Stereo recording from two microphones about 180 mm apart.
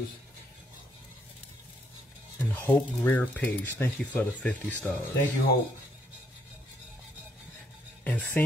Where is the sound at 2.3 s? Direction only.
10° left (ahead or behind).